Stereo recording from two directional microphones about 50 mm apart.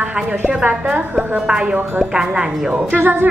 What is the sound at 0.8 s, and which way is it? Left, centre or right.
A woman's voice, centre.